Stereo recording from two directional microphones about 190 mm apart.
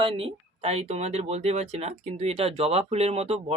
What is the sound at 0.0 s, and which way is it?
Speech, 30° right (ahead or behind).